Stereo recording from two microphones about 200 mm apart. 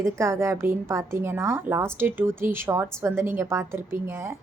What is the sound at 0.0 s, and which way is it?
A woman's voice, 15° right (ahead or behind).